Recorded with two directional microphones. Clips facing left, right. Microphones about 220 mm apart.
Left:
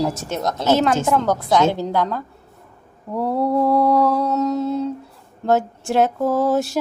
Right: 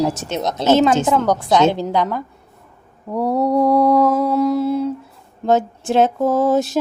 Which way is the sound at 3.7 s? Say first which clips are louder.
Right 3 dB; 20° right (ahead or behind).